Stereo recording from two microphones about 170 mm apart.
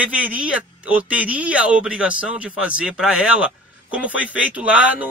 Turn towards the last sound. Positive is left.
turn(degrees=-10)  # may be behind; listen again after turning